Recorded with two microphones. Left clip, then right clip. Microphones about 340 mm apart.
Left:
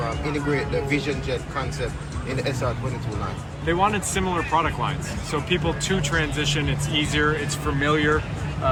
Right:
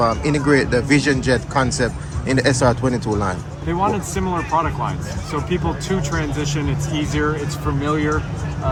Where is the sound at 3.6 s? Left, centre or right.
Centre.